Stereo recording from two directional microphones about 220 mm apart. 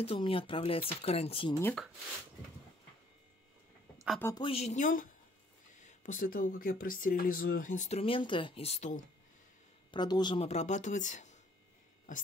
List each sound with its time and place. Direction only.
0.0 s speech: 25° left (ahead or behind)
1.6 s speech: 10° left (ahead or behind)
4.4 s speech: 25° left (ahead or behind)
9.8 s speech: 20° left (ahead or behind)